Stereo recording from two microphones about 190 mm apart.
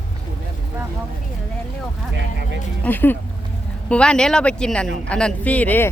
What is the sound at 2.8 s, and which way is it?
Speech, 10° left (ahead or behind).